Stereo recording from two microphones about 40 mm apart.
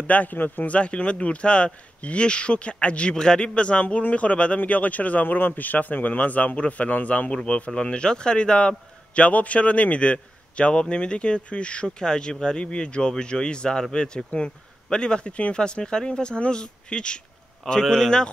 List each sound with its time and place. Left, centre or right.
0.0 s speech: left
0.7 s a man's voice: left